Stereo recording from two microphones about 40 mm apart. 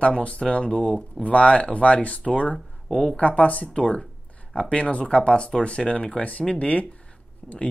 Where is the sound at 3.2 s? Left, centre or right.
Left.